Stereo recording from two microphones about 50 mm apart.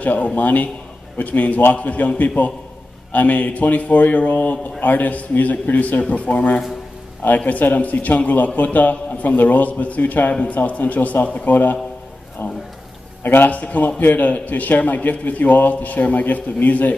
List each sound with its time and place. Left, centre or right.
0.0 s a man's voice: left
13.2 s a man's voice: left